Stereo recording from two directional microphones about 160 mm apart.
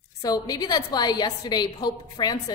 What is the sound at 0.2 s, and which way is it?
A woman's voice, 25° left (ahead or behind).